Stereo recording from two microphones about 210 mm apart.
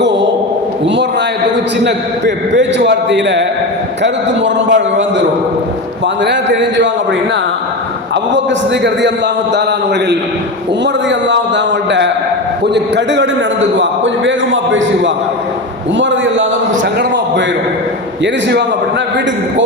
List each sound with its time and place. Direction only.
1.8 s a man's voice: 55° right (ahead or behind)
6.2 s a man's voice: 55° right (ahead or behind)